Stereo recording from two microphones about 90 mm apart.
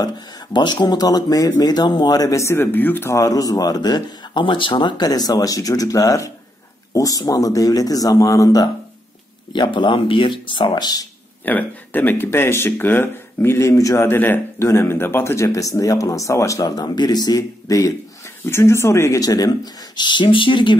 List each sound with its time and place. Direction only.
0.5 s speech: 55° left (ahead or behind); by 3.1 s 20° left (ahead or behind)
3.1 s speech: 40° left (ahead or behind)
9.5 s speech: 60° left (ahead or behind)
11.4 s speech: 20° left (ahead or behind); by 14.0 s 35° left (ahead or behind)
14.0 s speech: 20° left (ahead or behind); by 20.7 s 65° left (ahead or behind)